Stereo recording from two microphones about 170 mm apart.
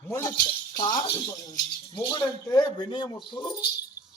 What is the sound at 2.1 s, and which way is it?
A man's voice, 25° left (ahead or behind).